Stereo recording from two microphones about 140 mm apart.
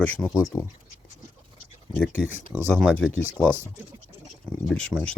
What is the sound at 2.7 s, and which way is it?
Speech, 5° left (ahead or behind).